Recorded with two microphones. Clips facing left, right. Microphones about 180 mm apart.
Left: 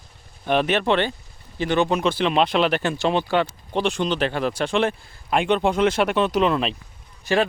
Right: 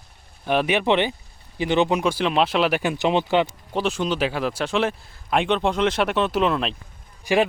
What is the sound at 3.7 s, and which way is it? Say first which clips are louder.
Speech: left 1 dB; 5° right (ahead or behind).